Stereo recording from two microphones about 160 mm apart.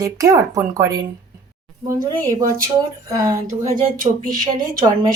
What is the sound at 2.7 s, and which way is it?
Speech, 20° right (ahead or behind).